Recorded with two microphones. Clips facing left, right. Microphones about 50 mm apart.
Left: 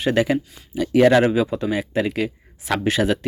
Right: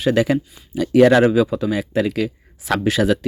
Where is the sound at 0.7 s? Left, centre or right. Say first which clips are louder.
Right 2 dB; centre.